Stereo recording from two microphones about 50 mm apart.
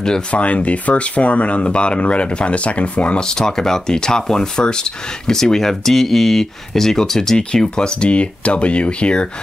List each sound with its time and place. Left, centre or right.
0.3 s speech: left
3.2 s speech: centre